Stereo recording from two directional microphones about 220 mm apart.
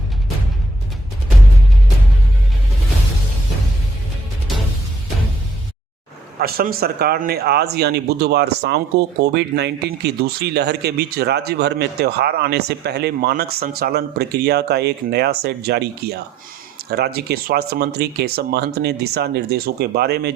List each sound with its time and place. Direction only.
6.4 s speech: 40° right (ahead or behind)